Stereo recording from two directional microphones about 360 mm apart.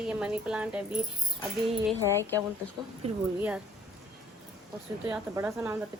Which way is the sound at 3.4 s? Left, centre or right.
Centre.